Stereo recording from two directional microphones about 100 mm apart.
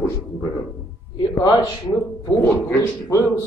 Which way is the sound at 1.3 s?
40° left (ahead or behind).